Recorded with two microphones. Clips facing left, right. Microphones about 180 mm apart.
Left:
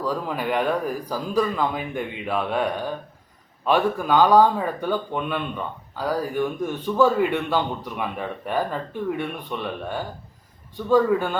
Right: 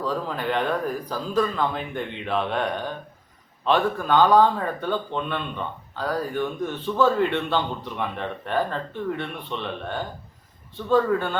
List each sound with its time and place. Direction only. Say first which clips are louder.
0.0 s a man's voice: left 1 dB; 10° left (ahead or behind)